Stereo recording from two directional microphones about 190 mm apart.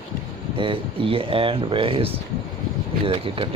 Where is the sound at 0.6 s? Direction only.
30° right (ahead or behind).